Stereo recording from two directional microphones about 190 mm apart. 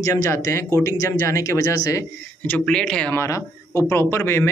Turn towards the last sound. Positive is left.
turn(degrees=10)  # may be behind; listen again after turning